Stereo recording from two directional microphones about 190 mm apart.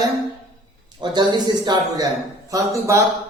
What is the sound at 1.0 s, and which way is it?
A man's voice, 20° right (ahead or behind).